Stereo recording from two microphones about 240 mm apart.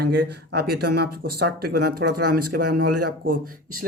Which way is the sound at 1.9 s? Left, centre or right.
Right.